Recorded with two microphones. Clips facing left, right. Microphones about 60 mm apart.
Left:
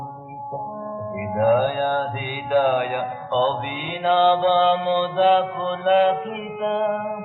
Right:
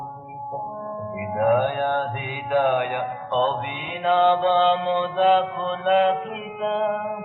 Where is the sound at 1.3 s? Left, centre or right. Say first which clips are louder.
Left 2 dB; centre.